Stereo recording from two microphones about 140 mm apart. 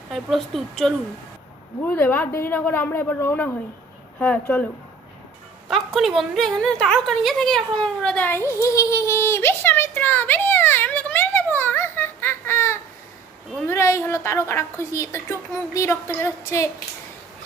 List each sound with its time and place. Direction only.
0.1 s a woman's voice: centre (ahead or behind)
1.8 s a woman's voice: 15° left (ahead or behind)
5.6 s a woman's voice: centre (ahead or behind); by 8.5 s 15° left (ahead or behind)
8.6 s a sound: 25° left (ahead or behind)
13.7 s a woman's voice: 20° left (ahead or behind)